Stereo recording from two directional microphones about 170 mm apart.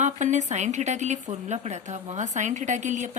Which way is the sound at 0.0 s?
45° right (ahead or behind).